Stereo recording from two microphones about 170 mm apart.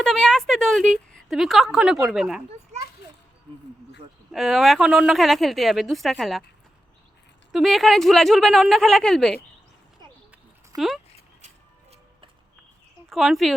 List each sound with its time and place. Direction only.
0.0 s a sound: 5° left (ahead or behind)
1.1 s speech: centre (ahead or behind)
4.3 s speech: centre (ahead or behind)
7.5 s speech: centre (ahead or behind)
10.8 s speech: centre (ahead or behind)
11.4 s music: 35° right (ahead or behind)
13.1 s speech: centre (ahead or behind)